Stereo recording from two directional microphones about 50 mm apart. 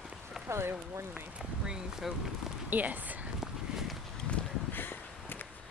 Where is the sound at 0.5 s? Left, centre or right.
Right.